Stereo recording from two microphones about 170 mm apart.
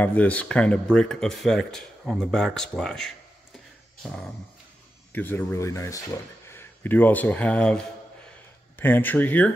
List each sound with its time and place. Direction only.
0.0 s speech: 10° left (ahead or behind)
5.1 s speech: 10° left (ahead or behind)